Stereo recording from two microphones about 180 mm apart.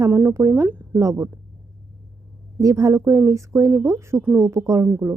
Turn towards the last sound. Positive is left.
turn(degrees=-15)  # may be behind; listen again after turning